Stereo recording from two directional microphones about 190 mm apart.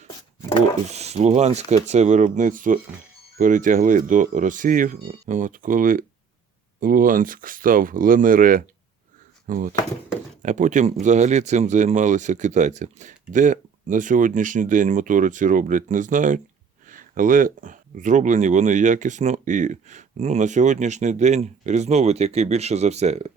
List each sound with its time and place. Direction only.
0.9 s speech: 35° right (ahead or behind)